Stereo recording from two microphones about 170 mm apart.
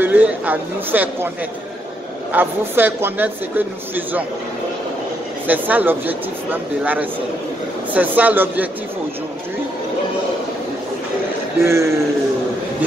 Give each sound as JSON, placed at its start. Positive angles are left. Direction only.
{"t": 0.0, "sound": "speech", "side_deg": -10}
{"t": 2.3, "sound": "speech", "side_deg": -10}
{"t": 5.5, "sound": "speech", "side_deg": -10}
{"t": 11.6, "sound": "speech", "side_deg": -15}